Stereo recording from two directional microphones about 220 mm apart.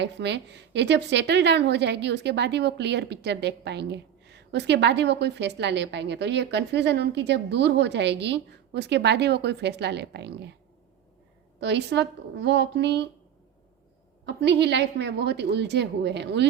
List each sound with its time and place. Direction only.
0.0 s a woman's voice: 50° right (ahead or behind)
11.6 s a woman's voice: 50° right (ahead or behind)
14.3 s a woman's voice: 50° right (ahead or behind)